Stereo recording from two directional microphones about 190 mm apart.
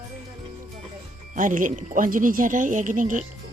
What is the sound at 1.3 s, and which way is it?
Speech, 45° right (ahead or behind).